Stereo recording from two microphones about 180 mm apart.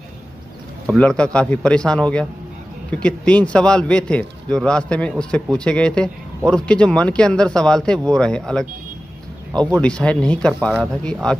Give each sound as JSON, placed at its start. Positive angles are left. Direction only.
{"t": 0.8, "sound": "a man's voice", "side_deg": 5}
{"t": 9.5, "sound": "speech", "side_deg": -20}
{"t": 9.8, "sound": "a man's voice", "side_deg": 5}